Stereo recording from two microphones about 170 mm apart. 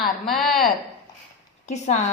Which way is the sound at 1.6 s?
40° left (ahead or behind).